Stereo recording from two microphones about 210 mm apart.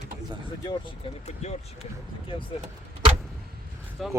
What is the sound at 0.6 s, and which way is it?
Speech, 25° left (ahead or behind).